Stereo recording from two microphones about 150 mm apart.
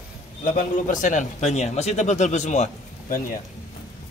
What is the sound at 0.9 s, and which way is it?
Speech, 55° left (ahead or behind).